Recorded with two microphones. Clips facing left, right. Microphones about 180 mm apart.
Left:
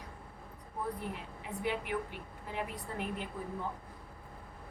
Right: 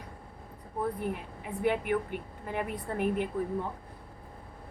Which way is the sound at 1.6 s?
55° right (ahead or behind).